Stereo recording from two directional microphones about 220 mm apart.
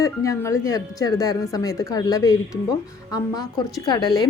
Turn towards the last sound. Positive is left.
turn(degrees=20)  # may be behind; listen again after turning